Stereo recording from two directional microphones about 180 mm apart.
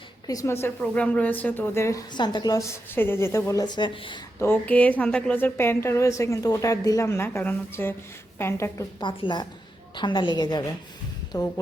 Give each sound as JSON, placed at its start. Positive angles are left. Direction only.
{"t": 0.3, "sound": "a woman's voice", "side_deg": 15}
{"t": 4.4, "sound": "a woman's voice", "side_deg": 10}
{"t": 9.0, "sound": "a woman's voice", "side_deg": 25}